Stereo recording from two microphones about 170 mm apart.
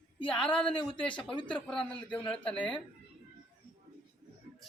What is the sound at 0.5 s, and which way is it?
Speech, 30° left (ahead or behind).